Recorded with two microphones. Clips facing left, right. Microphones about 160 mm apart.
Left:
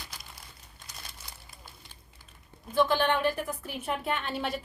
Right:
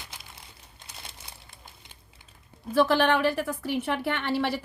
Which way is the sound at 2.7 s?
75° right (ahead or behind).